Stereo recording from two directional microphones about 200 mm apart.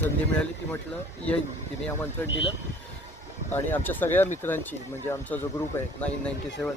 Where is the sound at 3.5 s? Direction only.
10° left (ahead or behind).